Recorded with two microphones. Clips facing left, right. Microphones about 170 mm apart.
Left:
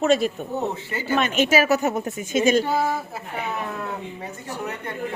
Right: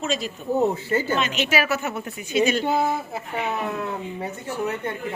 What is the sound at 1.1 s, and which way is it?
Speech, 50° left (ahead or behind).